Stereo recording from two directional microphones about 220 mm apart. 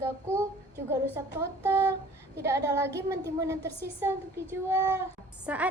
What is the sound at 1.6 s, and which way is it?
Speech, 10° right (ahead or behind).